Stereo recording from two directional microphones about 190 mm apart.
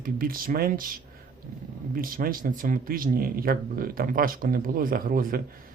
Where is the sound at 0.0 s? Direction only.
50° right (ahead or behind).